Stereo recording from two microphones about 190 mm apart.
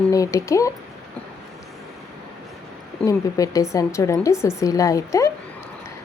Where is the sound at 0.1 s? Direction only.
15° left (ahead or behind).